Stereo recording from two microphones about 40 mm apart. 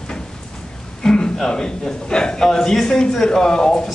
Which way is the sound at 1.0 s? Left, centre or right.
Centre.